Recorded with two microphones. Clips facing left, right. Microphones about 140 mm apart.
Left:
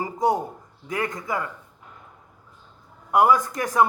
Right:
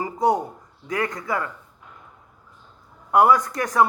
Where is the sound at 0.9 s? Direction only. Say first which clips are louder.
Right 2 dB; 25° left (ahead or behind).